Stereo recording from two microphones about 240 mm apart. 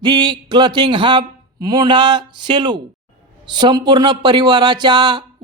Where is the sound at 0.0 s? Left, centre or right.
Centre.